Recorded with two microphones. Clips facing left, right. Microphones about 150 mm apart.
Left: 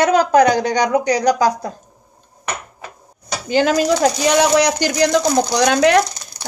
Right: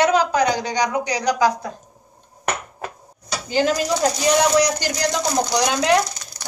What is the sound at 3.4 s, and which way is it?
Speech, 70° left (ahead or behind).